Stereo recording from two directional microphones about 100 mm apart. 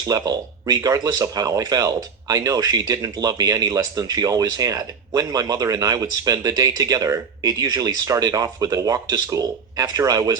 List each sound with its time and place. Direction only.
0.1 s speech: 40° right (ahead or behind)